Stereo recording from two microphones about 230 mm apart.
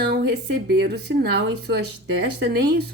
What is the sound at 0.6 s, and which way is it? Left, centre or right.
Speech, right.